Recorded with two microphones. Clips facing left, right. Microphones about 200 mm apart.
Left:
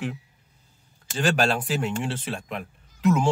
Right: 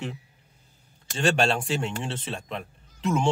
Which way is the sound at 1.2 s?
25° right (ahead or behind).